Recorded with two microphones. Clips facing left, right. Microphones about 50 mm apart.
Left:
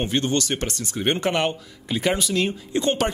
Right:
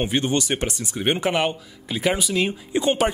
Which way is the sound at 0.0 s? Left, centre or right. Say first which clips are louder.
Right 1 dB; centre.